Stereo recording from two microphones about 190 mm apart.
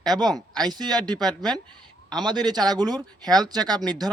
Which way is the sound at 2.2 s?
20° right (ahead or behind).